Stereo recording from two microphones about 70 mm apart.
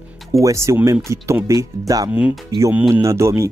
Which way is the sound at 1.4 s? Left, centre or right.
Right.